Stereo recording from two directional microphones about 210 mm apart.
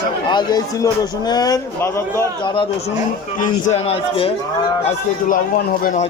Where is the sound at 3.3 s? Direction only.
40° left (ahead or behind).